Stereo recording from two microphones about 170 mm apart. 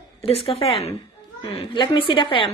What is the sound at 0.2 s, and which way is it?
A woman's voice, 35° left (ahead or behind).